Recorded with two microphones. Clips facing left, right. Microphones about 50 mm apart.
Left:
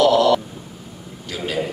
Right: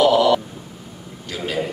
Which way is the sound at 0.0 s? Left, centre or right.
Centre.